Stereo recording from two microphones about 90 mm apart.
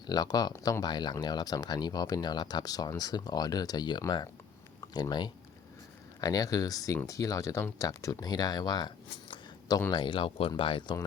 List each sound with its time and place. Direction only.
0.1 s speech: 45° left (ahead or behind)
9.9 s speech: 70° left (ahead or behind)
10.6 s speech: 75° left (ahead or behind)